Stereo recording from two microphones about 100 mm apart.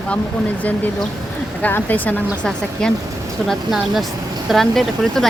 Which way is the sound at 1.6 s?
15° left (ahead or behind).